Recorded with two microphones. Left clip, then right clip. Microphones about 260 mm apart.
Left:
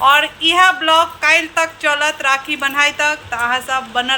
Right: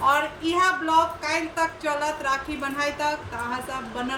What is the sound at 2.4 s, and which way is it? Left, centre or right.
Speech, left.